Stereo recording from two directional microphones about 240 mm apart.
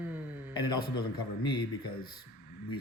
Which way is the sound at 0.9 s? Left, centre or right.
Centre.